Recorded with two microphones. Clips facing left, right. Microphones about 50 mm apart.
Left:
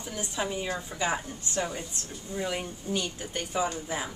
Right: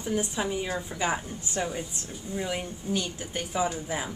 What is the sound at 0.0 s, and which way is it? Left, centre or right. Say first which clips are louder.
Speech: right 8 dB; centre.